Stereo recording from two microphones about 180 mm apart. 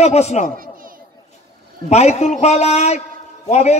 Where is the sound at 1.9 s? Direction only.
35° left (ahead or behind).